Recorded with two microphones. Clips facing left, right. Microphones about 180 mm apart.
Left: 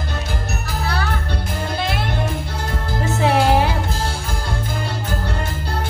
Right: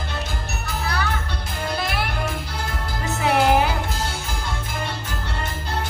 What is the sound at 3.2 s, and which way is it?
Music, 30° left (ahead or behind).